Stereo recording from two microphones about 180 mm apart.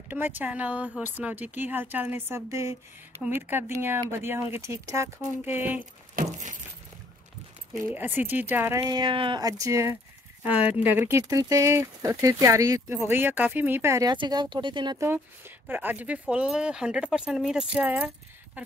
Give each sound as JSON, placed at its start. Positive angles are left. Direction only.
{"t": 0.1, "sound": "speech", "side_deg": -10}
{"t": 6.2, "sound": "a sound", "side_deg": -40}
{"t": 7.9, "sound": "speech", "side_deg": -10}
{"t": 8.8, "sound": "speech", "side_deg": -25}
{"t": 15.6, "sound": "speech", "side_deg": -10}